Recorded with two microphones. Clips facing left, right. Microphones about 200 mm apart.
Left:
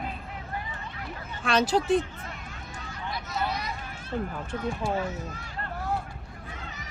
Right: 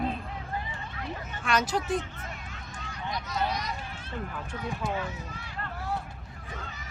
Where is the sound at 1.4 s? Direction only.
30° left (ahead or behind).